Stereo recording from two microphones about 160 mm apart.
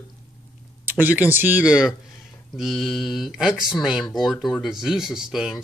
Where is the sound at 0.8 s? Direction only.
10° right (ahead or behind).